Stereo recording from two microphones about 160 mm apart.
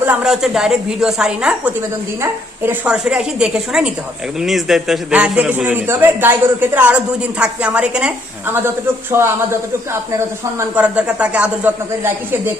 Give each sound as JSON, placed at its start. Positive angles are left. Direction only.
{"t": 0.0, "sound": "a woman's voice", "side_deg": -5}
{"t": 9.1, "sound": "a man's voice", "side_deg": -15}